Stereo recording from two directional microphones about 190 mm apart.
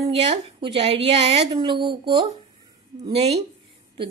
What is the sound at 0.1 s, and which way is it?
A woman's voice, 30° right (ahead or behind).